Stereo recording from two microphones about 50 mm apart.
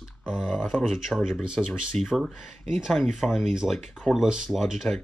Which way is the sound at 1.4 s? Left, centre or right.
Centre.